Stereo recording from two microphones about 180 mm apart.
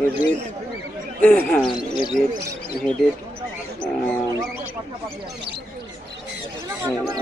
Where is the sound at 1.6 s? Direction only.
25° left (ahead or behind).